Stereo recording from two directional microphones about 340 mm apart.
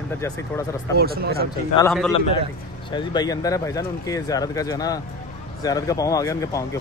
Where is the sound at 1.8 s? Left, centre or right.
Centre.